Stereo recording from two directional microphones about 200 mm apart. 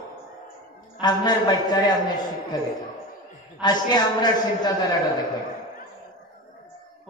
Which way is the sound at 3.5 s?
20° left (ahead or behind).